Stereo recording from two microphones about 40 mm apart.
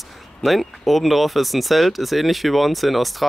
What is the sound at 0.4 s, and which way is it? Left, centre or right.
Speech, centre.